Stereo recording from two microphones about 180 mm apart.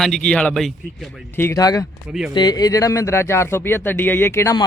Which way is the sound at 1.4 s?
15° left (ahead or behind).